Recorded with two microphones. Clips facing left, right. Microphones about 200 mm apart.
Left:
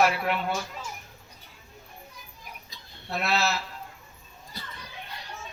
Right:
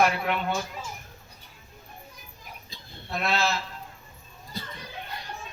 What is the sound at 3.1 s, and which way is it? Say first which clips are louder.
Speech: even; 5° left (ahead or behind).